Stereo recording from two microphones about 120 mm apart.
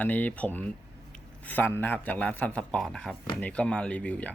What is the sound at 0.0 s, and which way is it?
Speech, 15° left (ahead or behind).